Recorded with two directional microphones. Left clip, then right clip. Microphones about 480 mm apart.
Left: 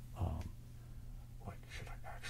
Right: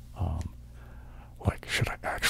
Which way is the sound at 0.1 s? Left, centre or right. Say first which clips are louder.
Right 8 dB; centre.